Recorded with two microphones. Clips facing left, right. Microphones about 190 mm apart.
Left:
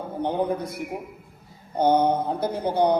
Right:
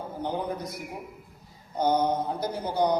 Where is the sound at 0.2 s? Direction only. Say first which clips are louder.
Left 6 dB; 55° left (ahead or behind).